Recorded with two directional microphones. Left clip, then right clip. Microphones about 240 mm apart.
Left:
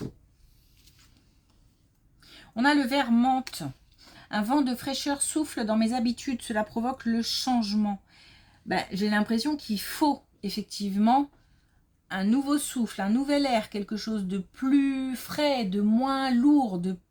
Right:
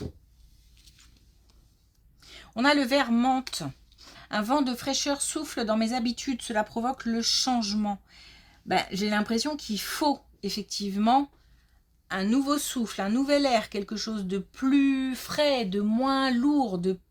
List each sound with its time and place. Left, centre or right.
2.2 s speech: right